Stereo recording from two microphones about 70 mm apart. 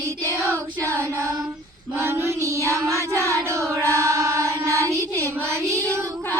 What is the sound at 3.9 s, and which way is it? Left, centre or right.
Music, right.